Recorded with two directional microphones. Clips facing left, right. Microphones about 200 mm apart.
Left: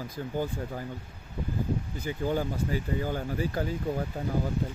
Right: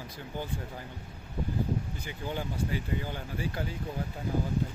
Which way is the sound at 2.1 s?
45° left (ahead or behind).